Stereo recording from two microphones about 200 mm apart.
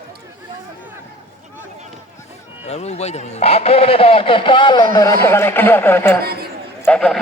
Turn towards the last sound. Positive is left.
turn(degrees=5)  # may be behind; listen again after turning